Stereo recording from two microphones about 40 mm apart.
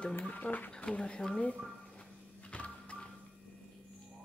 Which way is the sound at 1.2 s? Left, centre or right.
Centre.